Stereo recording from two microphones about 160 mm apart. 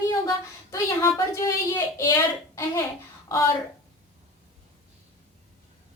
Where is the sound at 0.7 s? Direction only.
20° left (ahead or behind).